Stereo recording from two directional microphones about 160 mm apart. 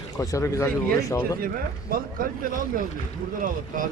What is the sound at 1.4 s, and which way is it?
Speech, 65° right (ahead or behind).